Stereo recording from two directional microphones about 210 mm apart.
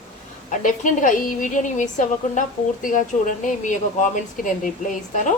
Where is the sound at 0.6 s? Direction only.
40° left (ahead or behind).